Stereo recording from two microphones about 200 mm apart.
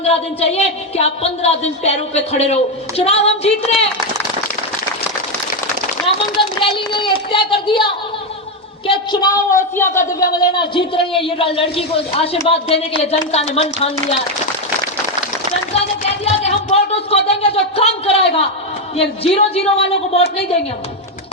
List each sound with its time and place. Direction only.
0.0 s a woman's voice: 30° left (ahead or behind)
6.1 s a sound: 25° left (ahead or behind)
6.6 s a child's voice: 25° left (ahead or behind)
8.9 s a woman's voice: 15° left (ahead or behind)
16.4 s a sound: 30° left (ahead or behind)
18.9 s a man's voice: 30° left (ahead or behind)